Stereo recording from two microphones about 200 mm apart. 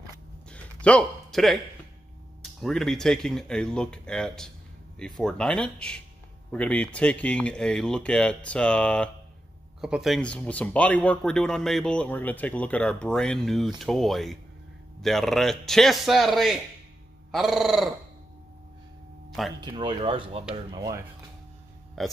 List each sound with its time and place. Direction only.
0.5 s a sound: 5° left (ahead or behind)
2.6 s speech: centre (ahead or behind)
19.6 s speech: 25° right (ahead or behind)
22.0 s speech: centre (ahead or behind)